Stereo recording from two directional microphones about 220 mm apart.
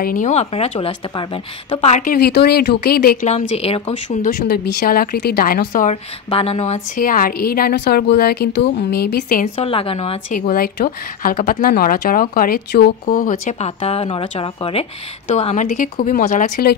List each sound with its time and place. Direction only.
0.0 s a woman's voice: 35° left (ahead or behind)
6.3 s a woman's voice: 25° left (ahead or behind)
9.7 s a woman's voice: 25° left (ahead or behind)